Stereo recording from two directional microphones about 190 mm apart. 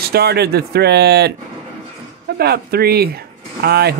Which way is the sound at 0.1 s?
55° right (ahead or behind).